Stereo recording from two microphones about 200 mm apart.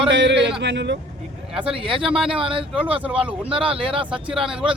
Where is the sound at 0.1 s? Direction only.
65° right (ahead or behind).